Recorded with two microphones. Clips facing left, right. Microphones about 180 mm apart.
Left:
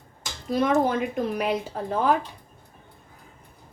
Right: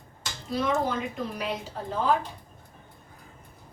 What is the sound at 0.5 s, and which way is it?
A woman's voice, 55° left (ahead or behind).